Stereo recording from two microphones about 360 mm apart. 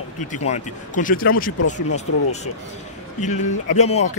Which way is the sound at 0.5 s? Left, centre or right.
Left.